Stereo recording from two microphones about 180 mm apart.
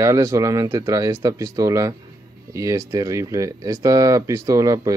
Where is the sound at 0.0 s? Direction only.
15° right (ahead or behind).